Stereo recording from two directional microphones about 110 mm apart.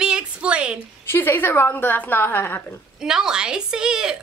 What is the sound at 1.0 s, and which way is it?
A woman's voice, 20° left (ahead or behind).